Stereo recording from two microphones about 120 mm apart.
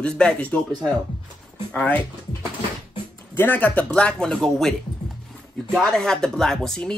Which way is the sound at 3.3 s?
15° left (ahead or behind).